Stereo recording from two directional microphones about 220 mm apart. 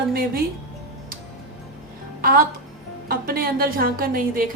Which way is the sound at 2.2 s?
40° right (ahead or behind).